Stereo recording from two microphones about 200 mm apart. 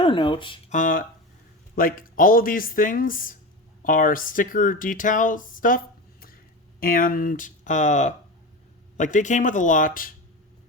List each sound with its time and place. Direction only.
0.0 s speech: 25° left (ahead or behind)
0.7 s speech: 40° left (ahead or behind)